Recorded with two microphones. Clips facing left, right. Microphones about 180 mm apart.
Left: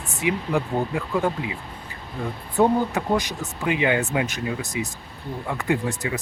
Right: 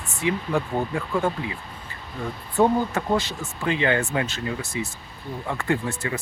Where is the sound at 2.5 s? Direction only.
15° left (ahead or behind).